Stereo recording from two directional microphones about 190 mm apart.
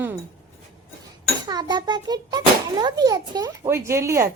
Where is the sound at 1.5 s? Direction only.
20° right (ahead or behind).